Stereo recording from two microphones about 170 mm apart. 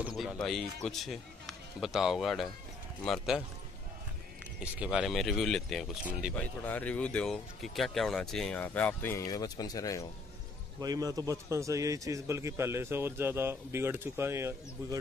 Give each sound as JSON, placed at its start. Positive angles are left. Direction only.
{"t": 0.0, "sound": "speech", "side_deg": -5}
{"t": 4.6, "sound": "speech", "side_deg": -5}
{"t": 10.8, "sound": "a man's voice", "side_deg": -20}